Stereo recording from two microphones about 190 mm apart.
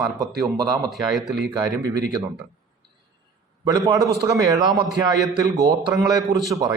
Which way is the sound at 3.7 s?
20° right (ahead or behind).